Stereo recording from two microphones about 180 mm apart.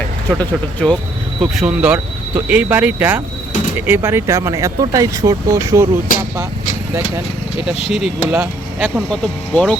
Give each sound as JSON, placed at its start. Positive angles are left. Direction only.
{"t": 0.3, "sound": "speech", "side_deg": 10}
{"t": 1.4, "sound": "speech", "side_deg": -5}
{"t": 8.3, "sound": "speech", "side_deg": -10}
{"t": 9.2, "sound": "speech", "side_deg": 5}